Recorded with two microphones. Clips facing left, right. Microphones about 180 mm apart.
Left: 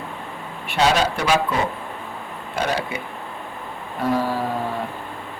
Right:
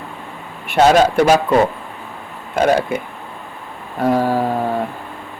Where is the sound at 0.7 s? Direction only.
50° right (ahead or behind).